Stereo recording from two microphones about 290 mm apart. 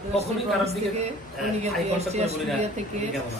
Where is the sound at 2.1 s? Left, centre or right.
Right.